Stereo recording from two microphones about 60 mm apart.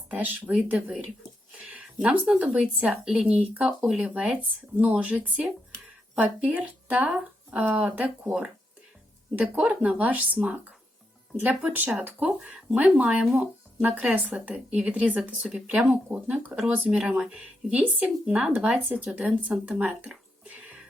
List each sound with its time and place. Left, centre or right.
0.1 s speech: right
9.4 s speech: centre
14.3 s speech: right
15.2 s speech: centre
16.0 s speech: right
16.6 s speech: right
19.6 s a sound: right